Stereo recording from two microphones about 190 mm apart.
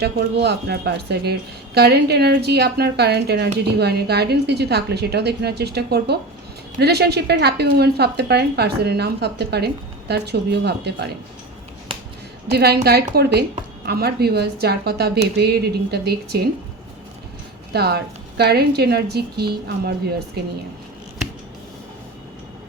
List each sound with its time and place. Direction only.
0.0 s speech: 60° right (ahead or behind)
12.5 s speech: 55° right (ahead or behind)
17.7 s speech: 60° right (ahead or behind)